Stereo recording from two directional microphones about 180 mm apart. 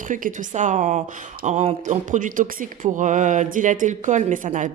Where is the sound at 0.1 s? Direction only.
45° right (ahead or behind).